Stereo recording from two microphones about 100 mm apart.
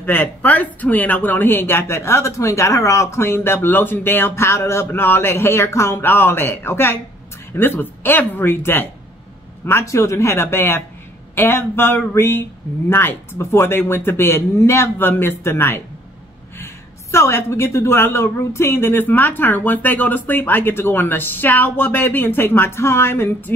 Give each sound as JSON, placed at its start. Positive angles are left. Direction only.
{"t": 0.0, "sound": "a woman's voice", "side_deg": 20}